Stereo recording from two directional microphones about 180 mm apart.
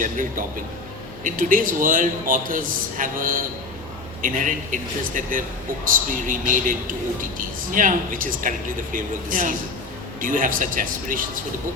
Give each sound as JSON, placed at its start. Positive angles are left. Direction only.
{"t": 0.0, "sound": "a man's voice", "side_deg": -50}